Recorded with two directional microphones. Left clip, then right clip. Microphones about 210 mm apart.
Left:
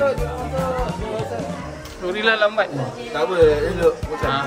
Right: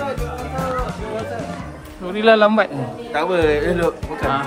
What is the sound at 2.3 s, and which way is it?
Speech, 25° right (ahead or behind).